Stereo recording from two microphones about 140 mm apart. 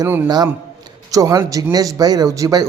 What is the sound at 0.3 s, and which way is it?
Speech, 30° right (ahead or behind).